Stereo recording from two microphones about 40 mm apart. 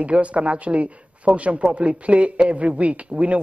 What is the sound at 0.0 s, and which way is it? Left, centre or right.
Speech, right.